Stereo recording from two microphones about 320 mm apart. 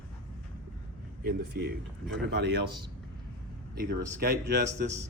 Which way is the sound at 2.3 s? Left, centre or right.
Right.